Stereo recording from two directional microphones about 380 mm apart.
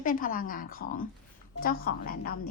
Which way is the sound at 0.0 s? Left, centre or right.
Left.